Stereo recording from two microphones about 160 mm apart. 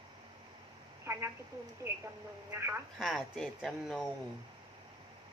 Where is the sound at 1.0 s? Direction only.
15° right (ahead or behind).